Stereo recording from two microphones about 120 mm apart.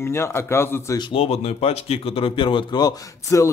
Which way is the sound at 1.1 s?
55° left (ahead or behind).